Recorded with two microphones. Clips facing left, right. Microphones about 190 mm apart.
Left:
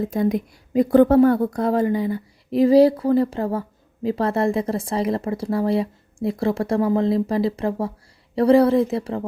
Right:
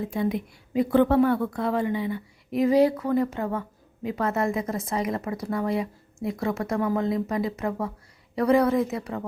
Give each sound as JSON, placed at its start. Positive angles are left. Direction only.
{"t": 0.0, "sound": "a woman's voice", "side_deg": 40}